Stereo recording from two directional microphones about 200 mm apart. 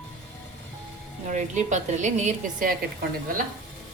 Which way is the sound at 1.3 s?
35° right (ahead or behind).